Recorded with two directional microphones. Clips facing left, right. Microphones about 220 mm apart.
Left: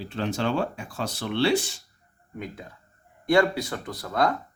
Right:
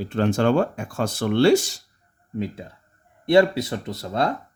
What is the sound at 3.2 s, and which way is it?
Speech, 25° right (ahead or behind).